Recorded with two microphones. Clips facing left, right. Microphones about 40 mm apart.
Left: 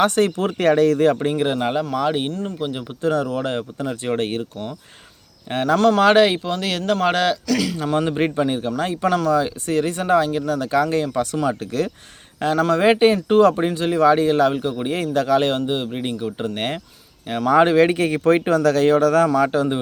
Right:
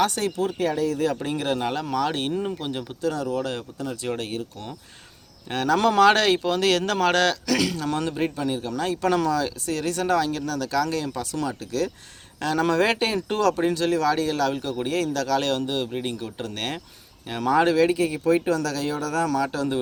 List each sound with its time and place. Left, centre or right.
0.0 s speech: left
1.3 s speech: left
1.8 s speech: centre
3.0 s speech: left
5.5 s speech: left
5.7 s speech: centre
6.0 s speech: centre
7.4 s speech: centre
7.9 s speech: left
9.0 s speech: centre
9.3 s speech: left
11.1 s speech: left
12.5 s speech: centre; by 19.8 s left